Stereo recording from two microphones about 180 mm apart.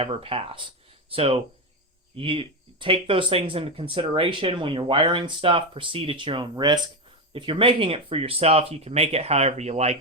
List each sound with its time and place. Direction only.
0.0 s speech: 30° right (ahead or behind)